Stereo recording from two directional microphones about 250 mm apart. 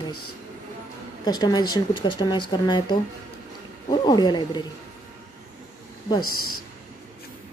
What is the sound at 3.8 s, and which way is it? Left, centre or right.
Speech, centre.